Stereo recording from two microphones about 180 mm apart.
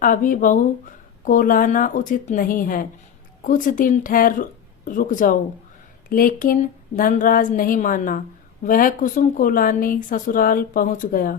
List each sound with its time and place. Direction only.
0.0 s speech: 50° left (ahead or behind)